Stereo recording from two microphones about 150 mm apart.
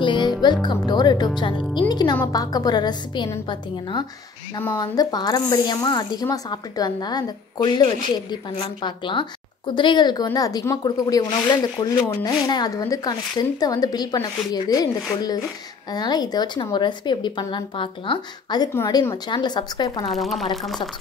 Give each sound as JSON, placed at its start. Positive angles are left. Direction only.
{"t": 0.0, "sound": "speech", "side_deg": 30}
{"t": 20.1, "sound": "speech", "side_deg": 0}